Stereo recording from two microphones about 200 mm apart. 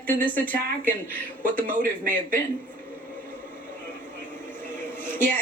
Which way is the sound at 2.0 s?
40° right (ahead or behind).